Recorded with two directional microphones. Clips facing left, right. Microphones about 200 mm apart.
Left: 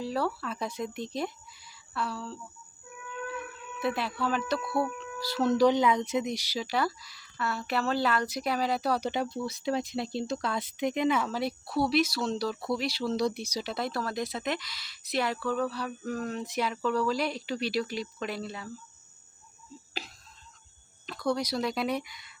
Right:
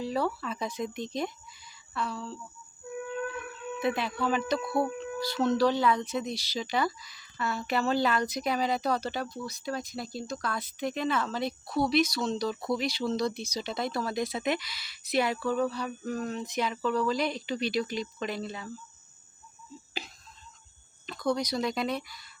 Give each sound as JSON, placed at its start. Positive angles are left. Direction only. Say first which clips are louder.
{"t": 0.0, "sound": "speech", "louder": "right 1 dB", "side_deg": 0}
{"t": 3.8, "sound": "speech", "louder": "right 1 dB", "side_deg": 0}
{"t": 4.6, "sound": "speech", "louder": "right 1 dB", "side_deg": -20}
{"t": 5.2, "sound": "speech", "louder": "left 2 dB", "side_deg": 5}
{"t": 21.1, "sound": "speech", "louder": "even", "side_deg": 5}